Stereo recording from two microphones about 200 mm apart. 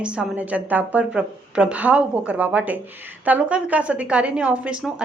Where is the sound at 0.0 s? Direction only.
5° right (ahead or behind).